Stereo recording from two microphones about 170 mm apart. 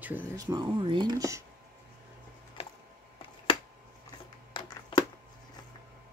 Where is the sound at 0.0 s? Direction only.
15° right (ahead or behind).